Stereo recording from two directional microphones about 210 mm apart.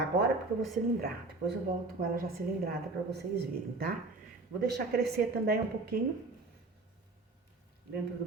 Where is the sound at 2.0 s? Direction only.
45° right (ahead or behind).